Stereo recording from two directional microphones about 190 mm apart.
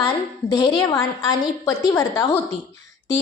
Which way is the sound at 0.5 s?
20° left (ahead or behind).